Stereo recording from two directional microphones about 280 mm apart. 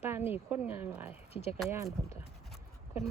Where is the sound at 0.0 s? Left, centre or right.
Centre.